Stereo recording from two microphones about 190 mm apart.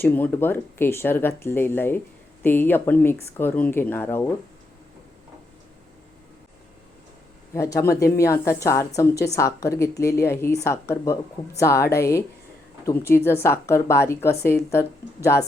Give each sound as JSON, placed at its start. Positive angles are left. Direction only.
{"t": 0.0, "sound": "speech", "side_deg": 10}
{"t": 7.5, "sound": "speech", "side_deg": 15}
{"t": 13.1, "sound": "speech", "side_deg": 10}